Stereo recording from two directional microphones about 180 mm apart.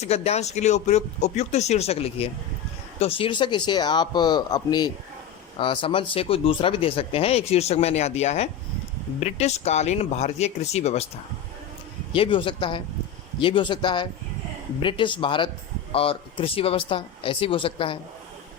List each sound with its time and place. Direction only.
0.0 s speech: 35° left (ahead or behind)
12.1 s speech: 30° left (ahead or behind)